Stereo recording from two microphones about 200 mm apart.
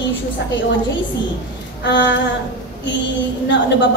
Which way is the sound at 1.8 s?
60° left (ahead or behind).